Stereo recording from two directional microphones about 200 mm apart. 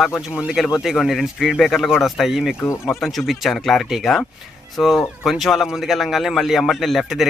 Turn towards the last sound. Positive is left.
turn(degrees=0)  # may be behind; listen again after turning